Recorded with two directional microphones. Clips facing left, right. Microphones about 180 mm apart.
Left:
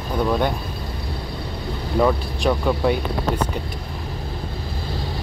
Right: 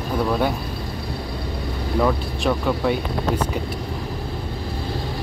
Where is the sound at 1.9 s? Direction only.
Centre (ahead or behind).